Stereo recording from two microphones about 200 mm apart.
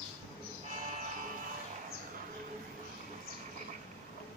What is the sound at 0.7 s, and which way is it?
Music, 40° right (ahead or behind).